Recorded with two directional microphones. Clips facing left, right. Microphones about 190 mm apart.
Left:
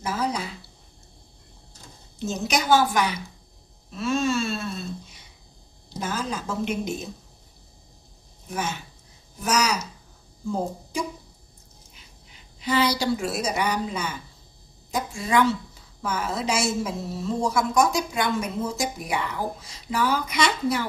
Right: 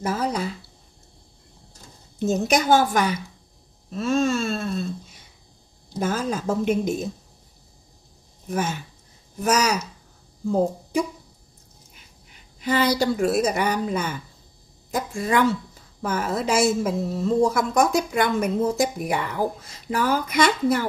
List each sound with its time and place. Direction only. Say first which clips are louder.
0.0 s speech: right 3 dB; 50° right (ahead or behind)
2.1 s a woman's voice: right 5 dB; 50° right (ahead or behind)
8.5 s a woman's voice: right 4 dB; 50° right (ahead or behind)
12.5 s a woman's voice: right 2 dB; 50° right (ahead or behind)